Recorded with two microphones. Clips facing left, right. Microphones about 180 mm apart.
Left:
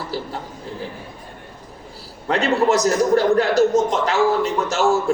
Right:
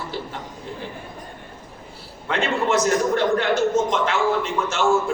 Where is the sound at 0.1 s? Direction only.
35° left (ahead or behind).